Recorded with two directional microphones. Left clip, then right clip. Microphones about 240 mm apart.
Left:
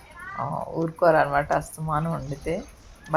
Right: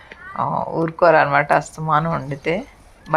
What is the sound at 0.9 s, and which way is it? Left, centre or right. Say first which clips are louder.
Speech: right 6 dB; centre.